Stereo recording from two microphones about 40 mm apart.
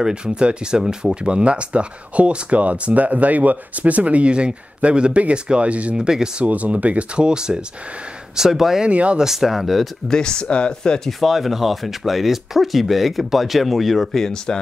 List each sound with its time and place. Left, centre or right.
0.1 s speech: right
5.9 s speech: centre
6.4 s speech: right
7.2 s speech: right
8.4 s speech: centre
8.8 s speech: right
9.2 s speech: centre
10.0 s speech: centre
10.7 s speech: centre
11.1 s speech: centre